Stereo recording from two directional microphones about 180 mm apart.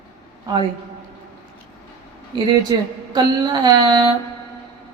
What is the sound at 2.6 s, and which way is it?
A woman's voice, 25° right (ahead or behind).